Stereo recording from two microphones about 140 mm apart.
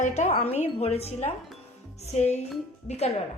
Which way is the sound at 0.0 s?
60° left (ahead or behind).